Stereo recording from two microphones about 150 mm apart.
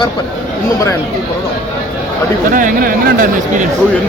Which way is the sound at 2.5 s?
65° right (ahead or behind).